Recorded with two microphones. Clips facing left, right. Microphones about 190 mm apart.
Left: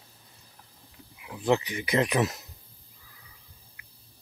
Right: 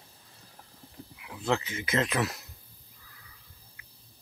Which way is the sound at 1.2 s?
15° left (ahead or behind).